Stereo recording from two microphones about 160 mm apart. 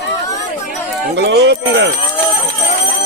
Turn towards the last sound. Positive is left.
turn(degrees=-90)